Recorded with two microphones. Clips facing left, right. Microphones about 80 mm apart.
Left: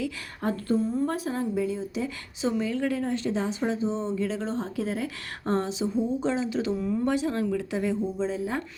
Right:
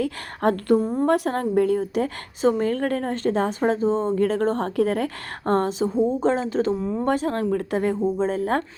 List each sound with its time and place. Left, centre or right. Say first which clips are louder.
0.0 s a woman's voice: right 8 dB; right